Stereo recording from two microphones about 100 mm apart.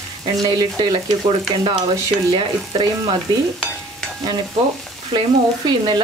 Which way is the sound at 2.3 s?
50° right (ahead or behind).